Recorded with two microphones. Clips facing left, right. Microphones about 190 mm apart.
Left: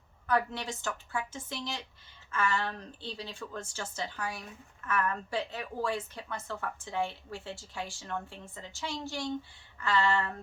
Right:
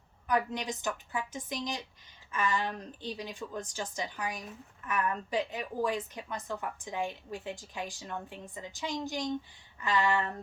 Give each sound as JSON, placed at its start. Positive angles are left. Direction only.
{"t": 0.3, "sound": "a woman's voice", "side_deg": -15}